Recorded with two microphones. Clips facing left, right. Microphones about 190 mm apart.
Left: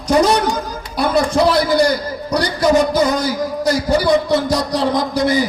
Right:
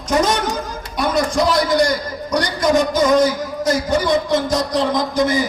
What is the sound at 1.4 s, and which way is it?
Speech, 30° left (ahead or behind).